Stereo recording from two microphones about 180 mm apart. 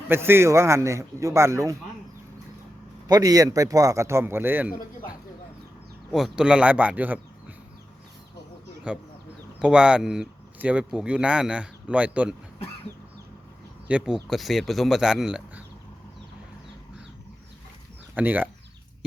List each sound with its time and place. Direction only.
0.1 s a man's voice: 15° right (ahead or behind)
3.1 s a man's voice: 20° right (ahead or behind)
8.9 s speech: 5° right (ahead or behind)
13.8 s speech: 5° right (ahead or behind)
18.1 s speech: 10° right (ahead or behind)